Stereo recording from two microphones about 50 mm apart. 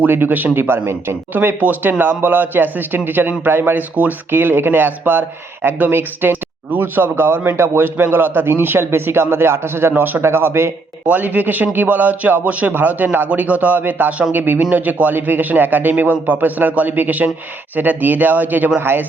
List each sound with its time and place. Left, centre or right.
0.1 s speech: right
4.3 s speech: right
9.9 s a man's voice: right
10.2 s a man's voice: right
11.1 s a man's voice: right